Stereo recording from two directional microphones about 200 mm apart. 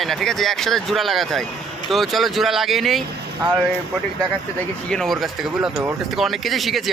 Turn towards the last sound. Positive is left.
turn(degrees=0)  # may be behind; listen again after turning